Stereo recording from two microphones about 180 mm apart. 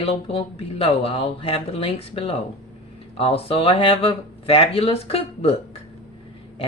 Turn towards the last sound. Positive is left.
turn(degrees=35)  # may be behind; listen again after turning